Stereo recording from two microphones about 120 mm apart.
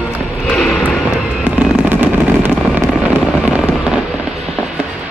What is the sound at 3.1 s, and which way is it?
Fireworks, 10° right (ahead or behind).